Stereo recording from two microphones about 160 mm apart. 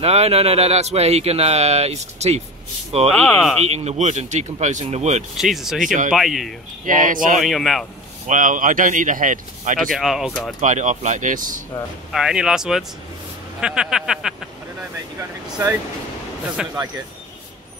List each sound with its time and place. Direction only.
0.0 s speech: 40° right (ahead or behind)
3.1 s speech: centre (ahead or behind)
3.6 s speech: 45° right (ahead or behind)
5.4 s speech: centre (ahead or behind)
6.9 s speech: 60° right (ahead or behind)
7.3 s speech: centre (ahead or behind)
8.3 s speech: 55° right (ahead or behind)
9.9 s speech: centre (ahead or behind)
10.6 s speech: 50° right (ahead or behind)
12.1 s speech: 5° right (ahead or behind)
16.6 s speech: 5° right (ahead or behind)